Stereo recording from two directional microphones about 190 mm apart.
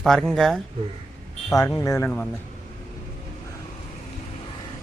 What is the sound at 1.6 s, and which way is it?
Speech, 20° left (ahead or behind).